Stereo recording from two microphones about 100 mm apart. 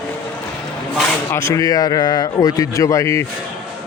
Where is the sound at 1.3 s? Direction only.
30° left (ahead or behind).